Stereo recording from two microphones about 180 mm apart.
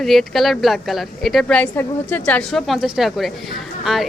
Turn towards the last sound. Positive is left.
turn(degrees=0)  # may be behind; listen again after turning